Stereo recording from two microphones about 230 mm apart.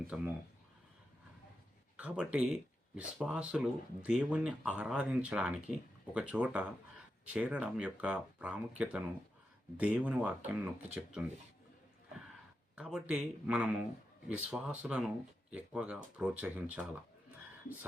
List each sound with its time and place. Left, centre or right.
0.1 s speech: centre
2.0 s speech: centre
12.7 s speech: centre